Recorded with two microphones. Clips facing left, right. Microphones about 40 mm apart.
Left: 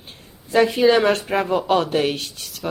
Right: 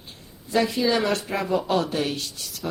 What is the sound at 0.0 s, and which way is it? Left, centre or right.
A woman's voice, left.